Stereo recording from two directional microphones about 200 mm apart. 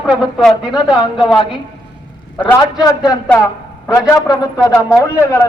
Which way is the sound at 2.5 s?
20° left (ahead or behind).